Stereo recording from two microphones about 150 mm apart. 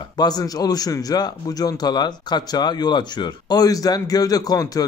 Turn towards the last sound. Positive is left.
turn(degrees=25)  # may be behind; listen again after turning